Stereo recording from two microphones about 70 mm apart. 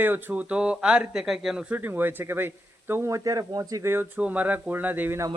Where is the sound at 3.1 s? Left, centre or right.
Right.